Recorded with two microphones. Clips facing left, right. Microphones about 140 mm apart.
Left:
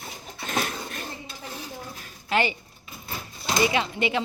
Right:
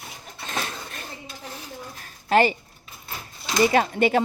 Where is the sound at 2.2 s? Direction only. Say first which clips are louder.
Right 6 dB; 40° right (ahead or behind).